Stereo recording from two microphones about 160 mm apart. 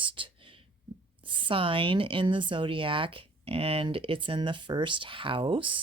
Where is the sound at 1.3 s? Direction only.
30° right (ahead or behind).